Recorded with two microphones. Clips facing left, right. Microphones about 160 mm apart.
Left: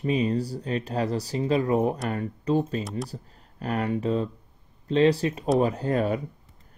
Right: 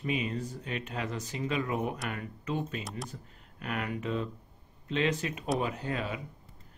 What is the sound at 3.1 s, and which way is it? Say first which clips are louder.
Speech: left 6 dB; 35° left (ahead or behind).